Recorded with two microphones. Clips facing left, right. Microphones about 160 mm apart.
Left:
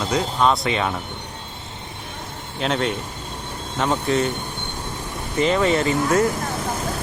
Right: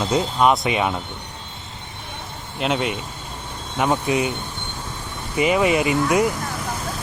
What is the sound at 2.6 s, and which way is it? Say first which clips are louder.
Speech: even; 5° right (ahead or behind).